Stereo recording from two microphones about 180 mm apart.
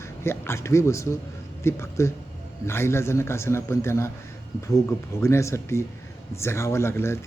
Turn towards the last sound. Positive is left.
turn(degrees=15)  # may be behind; listen again after turning